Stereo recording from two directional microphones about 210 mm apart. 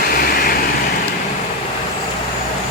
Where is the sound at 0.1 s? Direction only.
45° left (ahead or behind).